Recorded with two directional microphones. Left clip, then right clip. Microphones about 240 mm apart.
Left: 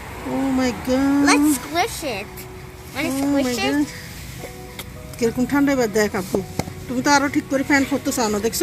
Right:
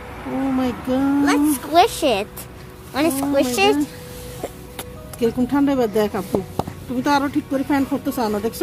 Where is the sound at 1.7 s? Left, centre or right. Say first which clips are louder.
Right 7 dB; right.